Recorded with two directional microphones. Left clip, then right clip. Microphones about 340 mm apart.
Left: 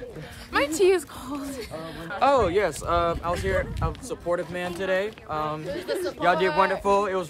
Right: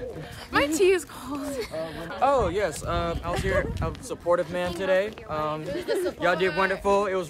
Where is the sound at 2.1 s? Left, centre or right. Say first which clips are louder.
Left 2 dB; left.